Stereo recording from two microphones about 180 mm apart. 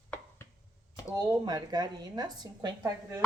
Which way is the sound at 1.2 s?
20° right (ahead or behind).